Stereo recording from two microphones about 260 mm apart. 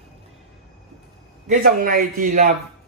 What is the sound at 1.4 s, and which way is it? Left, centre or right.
A man's voice, right.